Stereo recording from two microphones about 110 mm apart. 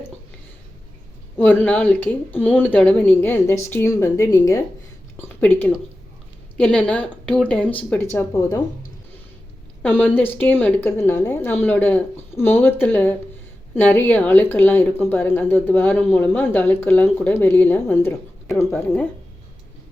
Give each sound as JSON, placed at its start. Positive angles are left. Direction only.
{"t": 1.4, "sound": "speech", "side_deg": 15}
{"t": 5.1, "sound": "a woman's voice", "side_deg": 20}
{"t": 8.3, "sound": "speech", "side_deg": 25}
{"t": 9.8, "sound": "speech", "side_deg": 15}